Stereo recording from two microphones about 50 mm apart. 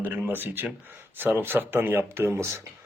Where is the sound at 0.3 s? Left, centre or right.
Right.